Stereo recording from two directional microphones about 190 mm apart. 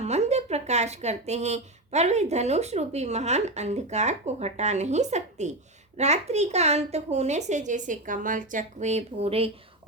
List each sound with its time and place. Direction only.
0.0 s speech: 35° right (ahead or behind)